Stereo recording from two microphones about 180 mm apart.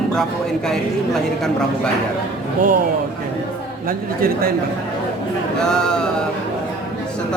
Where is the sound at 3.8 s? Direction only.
55° right (ahead or behind).